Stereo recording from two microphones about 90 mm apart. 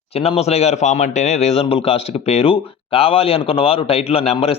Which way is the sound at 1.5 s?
90° left.